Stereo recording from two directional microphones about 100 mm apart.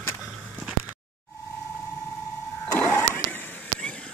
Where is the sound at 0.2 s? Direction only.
5° right (ahead or behind).